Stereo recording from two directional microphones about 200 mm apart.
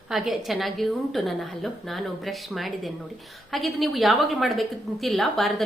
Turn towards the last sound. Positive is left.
turn(degrees=0)  # may be behind; listen again after turning